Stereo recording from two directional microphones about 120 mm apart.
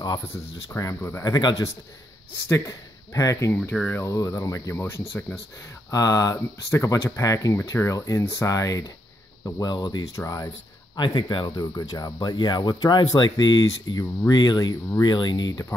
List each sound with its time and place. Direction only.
0.7 s speech: 25° left (ahead or behind)
3.5 s speech: 10° left (ahead or behind)
4.0 s speech: 25° left (ahead or behind)
11.0 s speech: 40° left (ahead or behind)